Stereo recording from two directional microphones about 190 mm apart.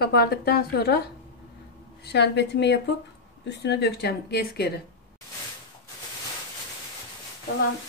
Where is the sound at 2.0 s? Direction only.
60° left (ahead or behind).